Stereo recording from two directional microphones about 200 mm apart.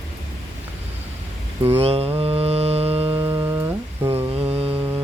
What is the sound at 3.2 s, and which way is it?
Music, 10° right (ahead or behind).